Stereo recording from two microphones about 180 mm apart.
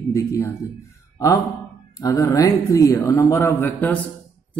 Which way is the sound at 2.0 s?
20° left (ahead or behind).